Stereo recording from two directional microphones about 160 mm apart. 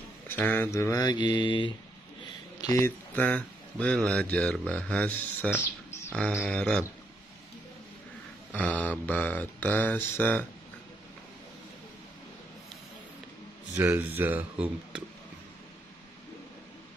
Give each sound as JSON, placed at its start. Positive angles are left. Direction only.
{"t": 0.3, "sound": "speech", "side_deg": 10}
{"t": 3.2, "sound": "speech", "side_deg": 10}
{"t": 8.5, "sound": "speech", "side_deg": 10}
{"t": 13.7, "sound": "speech", "side_deg": -10}